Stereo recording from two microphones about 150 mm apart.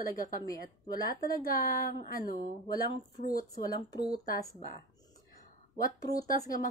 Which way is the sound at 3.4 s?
25° left (ahead or behind).